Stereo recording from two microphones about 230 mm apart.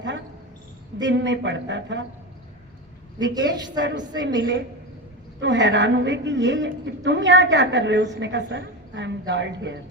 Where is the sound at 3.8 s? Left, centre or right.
Right.